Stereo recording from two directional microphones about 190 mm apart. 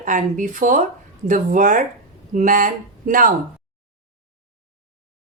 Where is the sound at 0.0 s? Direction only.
45° right (ahead or behind).